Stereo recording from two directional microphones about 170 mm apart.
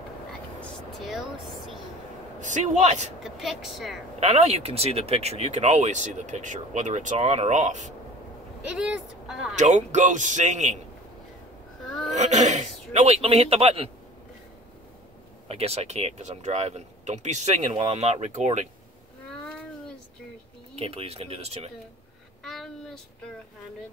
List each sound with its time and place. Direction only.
0.6 s a sound: centre (ahead or behind)
2.4 s speech: 45° right (ahead or behind)
3.3 s speech: centre (ahead or behind)
4.2 s speech: 40° right (ahead or behind)
8.6 s speech: 5° right (ahead or behind)
9.6 s speech: 45° right (ahead or behind)
11.8 s a sound: centre (ahead or behind)
12.2 s speech: 45° right (ahead or behind)
15.4 s speech: 35° right (ahead or behind)
20.7 s speech: 35° right (ahead or behind)
22.4 s a sound: centre (ahead or behind)